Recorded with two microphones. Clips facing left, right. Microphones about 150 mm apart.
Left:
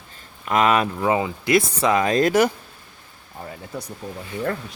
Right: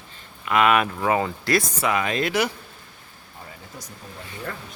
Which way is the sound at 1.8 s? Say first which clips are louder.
Left 5 dB; 35° left (ahead or behind).